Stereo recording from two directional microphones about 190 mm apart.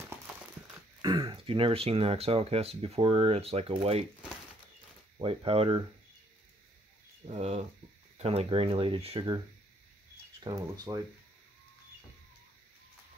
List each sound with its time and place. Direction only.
1.0 s speech: 25° right (ahead or behind)
5.2 s speech: 30° right (ahead or behind)
7.2 s speech: 35° right (ahead or behind)
10.4 s speech: 20° right (ahead or behind)